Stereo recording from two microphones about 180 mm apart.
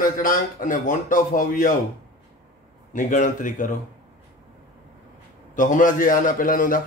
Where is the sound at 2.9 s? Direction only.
45° left (ahead or behind).